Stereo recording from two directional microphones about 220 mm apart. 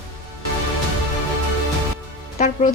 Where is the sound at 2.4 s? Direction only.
30° left (ahead or behind).